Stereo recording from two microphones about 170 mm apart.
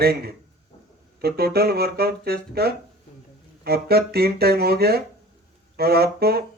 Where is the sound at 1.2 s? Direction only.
65° right (ahead or behind).